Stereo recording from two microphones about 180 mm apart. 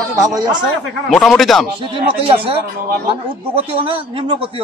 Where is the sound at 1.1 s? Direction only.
Centre (ahead or behind).